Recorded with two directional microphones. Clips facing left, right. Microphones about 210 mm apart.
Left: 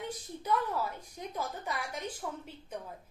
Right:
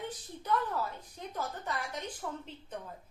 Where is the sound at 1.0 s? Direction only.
10° left (ahead or behind).